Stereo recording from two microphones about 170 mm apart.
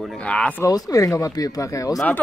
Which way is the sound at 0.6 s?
20° left (ahead or behind).